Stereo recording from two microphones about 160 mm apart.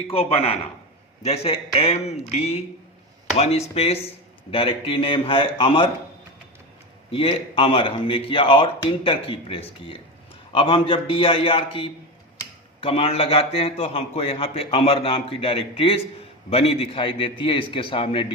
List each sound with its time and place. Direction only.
0.1 s a man's voice: 35° left (ahead or behind)
7.1 s a man's voice: 35° left (ahead or behind)